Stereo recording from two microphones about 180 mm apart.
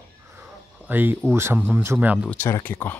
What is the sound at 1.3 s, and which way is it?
Speech, 10° right (ahead or behind).